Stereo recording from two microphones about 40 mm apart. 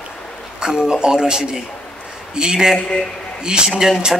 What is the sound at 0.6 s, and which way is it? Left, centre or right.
A man's voice, centre.